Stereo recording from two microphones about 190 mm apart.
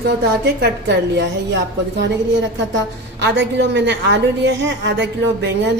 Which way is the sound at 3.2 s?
65° right (ahead or behind).